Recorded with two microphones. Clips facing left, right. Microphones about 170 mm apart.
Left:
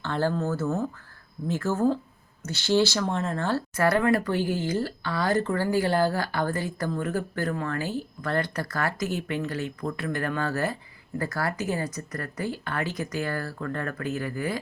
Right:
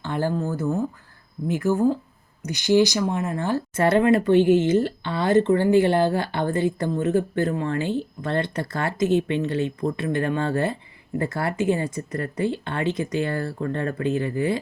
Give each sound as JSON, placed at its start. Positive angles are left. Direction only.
{"t": 0.0, "sound": "speech", "side_deg": -15}